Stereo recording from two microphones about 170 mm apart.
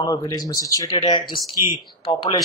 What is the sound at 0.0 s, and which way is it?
Speech, 20° left (ahead or behind).